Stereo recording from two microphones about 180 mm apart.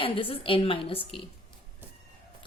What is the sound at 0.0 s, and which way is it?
A woman's voice, 30° left (ahead or behind).